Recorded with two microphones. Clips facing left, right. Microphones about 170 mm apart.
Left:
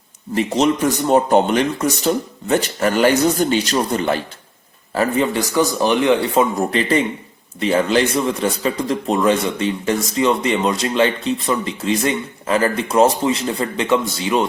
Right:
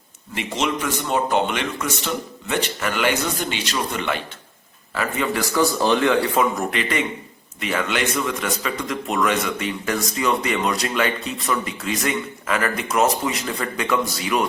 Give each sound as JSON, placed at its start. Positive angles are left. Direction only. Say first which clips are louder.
{"t": 0.3, "sound": "a man's voice", "louder": "left 8 dB", "side_deg": 40}